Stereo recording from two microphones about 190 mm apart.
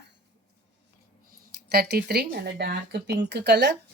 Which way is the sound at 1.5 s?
55° right (ahead or behind).